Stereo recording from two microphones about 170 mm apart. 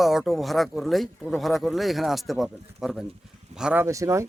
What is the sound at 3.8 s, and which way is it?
Speech, 20° right (ahead or behind).